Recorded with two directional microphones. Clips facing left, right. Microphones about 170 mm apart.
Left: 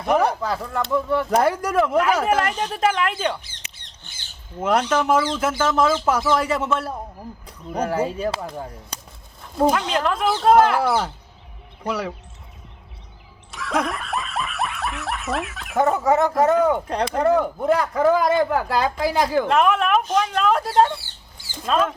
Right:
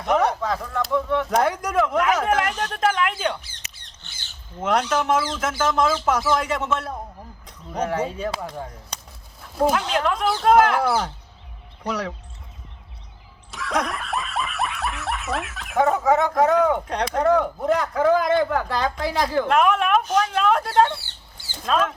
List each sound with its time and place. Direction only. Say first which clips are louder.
0.0 s speech: left 1 dB; 5° left (ahead or behind)
4.6 s speech: left 2 dB; 5° left (ahead or behind)
13.5 s speech: left 1 dB; centre (ahead or behind)